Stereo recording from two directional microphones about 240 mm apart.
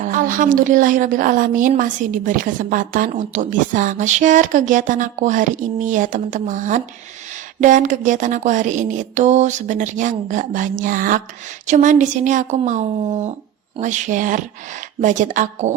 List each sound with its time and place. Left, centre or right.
0.0 s speech: right